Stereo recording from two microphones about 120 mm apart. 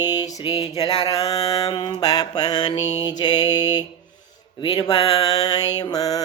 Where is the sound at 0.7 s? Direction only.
30° left (ahead or behind).